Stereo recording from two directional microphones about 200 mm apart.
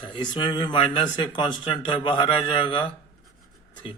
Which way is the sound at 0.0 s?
20° left (ahead or behind).